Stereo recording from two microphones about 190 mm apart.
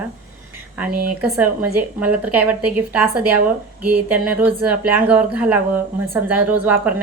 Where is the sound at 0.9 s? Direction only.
50° right (ahead or behind).